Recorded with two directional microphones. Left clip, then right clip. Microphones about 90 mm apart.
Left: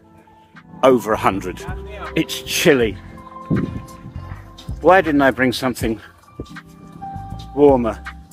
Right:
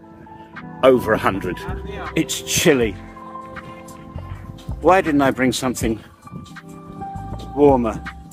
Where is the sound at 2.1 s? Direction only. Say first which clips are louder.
Left 1 dB; 30° right (ahead or behind).